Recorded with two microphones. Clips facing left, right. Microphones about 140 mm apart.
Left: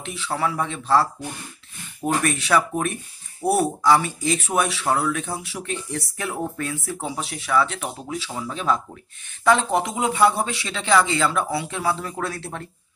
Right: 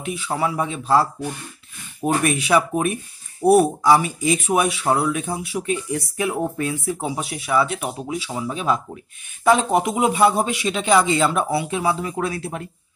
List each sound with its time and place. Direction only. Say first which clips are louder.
0.0 s speech: right 2 dB; 10° right (ahead or behind)
2.2 s speech: right 3 dB; 15° right (ahead or behind)
7.0 s speech: right 3 dB; 10° right (ahead or behind)
11.9 s speech: right 3 dB; 5° right (ahead or behind)